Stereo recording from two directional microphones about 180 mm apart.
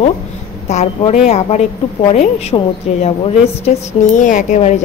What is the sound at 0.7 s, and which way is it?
A woman's voice, 40° left (ahead or behind).